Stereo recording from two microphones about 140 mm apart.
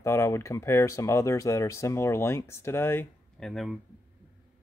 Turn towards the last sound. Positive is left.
turn(degrees=0)  # may be behind; listen again after turning